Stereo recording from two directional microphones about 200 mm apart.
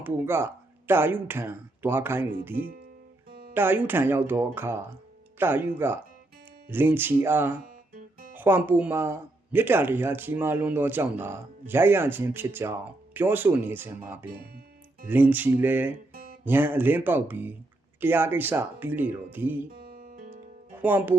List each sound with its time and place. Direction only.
0.0 s speech: 10° right (ahead or behind)
3.2 s music: 50° right (ahead or behind)
3.5 s speech: 10° right (ahead or behind)
7.9 s music: 45° right (ahead or behind)
8.4 s speech: 10° right (ahead or behind)
19.7 s music: 50° right (ahead or behind)
20.8 s speech: 10° right (ahead or behind)